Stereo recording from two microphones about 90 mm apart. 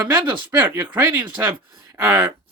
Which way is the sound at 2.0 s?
50° right (ahead or behind).